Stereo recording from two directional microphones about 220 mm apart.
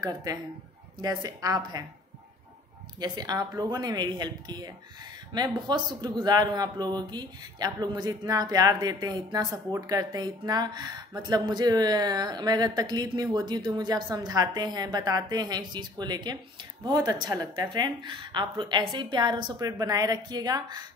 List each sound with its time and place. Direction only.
0.0 s speech: 15° right (ahead or behind)
3.0 s a woman's voice: 20° right (ahead or behind)